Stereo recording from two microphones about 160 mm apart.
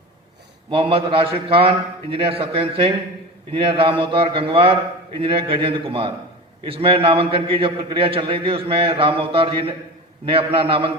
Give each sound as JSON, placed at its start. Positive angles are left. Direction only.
{"t": 0.7, "sound": "a man's voice", "side_deg": -35}